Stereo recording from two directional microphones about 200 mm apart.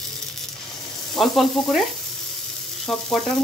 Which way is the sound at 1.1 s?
Centre (ahead or behind).